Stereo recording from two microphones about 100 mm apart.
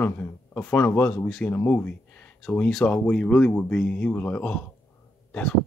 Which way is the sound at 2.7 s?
10° left (ahead or behind).